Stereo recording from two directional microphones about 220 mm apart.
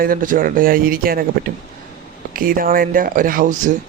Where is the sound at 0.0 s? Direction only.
40° right (ahead or behind).